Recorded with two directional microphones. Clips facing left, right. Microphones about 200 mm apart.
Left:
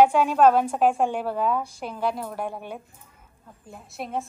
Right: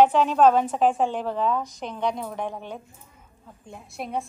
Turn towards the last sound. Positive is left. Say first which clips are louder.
# even
turn(degrees=0)  # may be behind; listen again after turning